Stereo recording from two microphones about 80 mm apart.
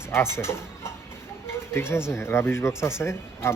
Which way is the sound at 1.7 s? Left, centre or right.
Left.